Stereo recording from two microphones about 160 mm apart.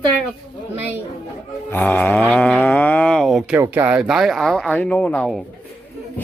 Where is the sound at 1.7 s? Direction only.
10° left (ahead or behind).